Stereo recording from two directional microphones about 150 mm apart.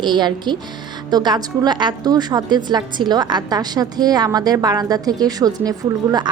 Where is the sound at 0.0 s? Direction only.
30° right (ahead or behind).